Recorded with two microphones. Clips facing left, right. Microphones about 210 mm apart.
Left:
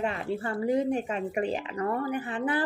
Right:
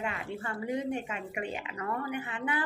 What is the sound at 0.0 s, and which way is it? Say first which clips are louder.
Speech: left 6 dB; 35° left (ahead or behind).